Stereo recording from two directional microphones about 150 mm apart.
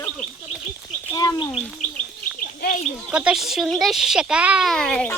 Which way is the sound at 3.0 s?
5° right (ahead or behind).